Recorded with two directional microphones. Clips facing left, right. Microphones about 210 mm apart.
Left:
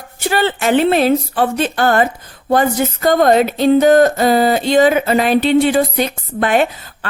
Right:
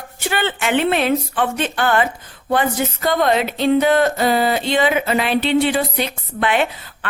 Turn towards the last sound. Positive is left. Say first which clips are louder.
# left 5 dB
turn(degrees=40)  # may be behind; listen again after turning